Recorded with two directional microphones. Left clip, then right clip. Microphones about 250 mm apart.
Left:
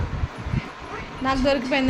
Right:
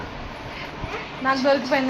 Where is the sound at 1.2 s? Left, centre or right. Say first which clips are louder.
Right 2 dB; left.